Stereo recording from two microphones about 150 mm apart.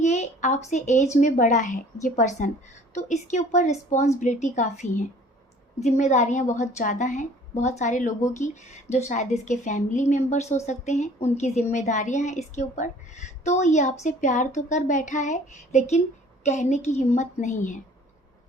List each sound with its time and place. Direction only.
0.0 s a woman's voice: 50° left (ahead or behind)